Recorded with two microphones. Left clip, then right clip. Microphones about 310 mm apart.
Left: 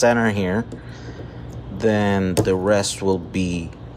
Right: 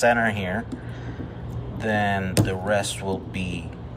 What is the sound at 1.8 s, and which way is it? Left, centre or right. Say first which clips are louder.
Speech: left 4 dB; centre.